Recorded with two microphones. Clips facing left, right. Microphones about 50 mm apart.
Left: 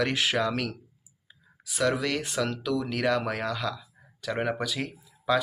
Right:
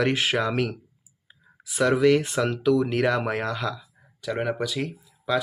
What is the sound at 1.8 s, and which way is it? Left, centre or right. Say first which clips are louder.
Speech: right 8 dB; centre.